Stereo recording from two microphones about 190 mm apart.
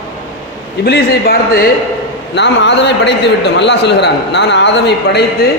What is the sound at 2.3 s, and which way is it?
A man's voice, 65° left (ahead or behind).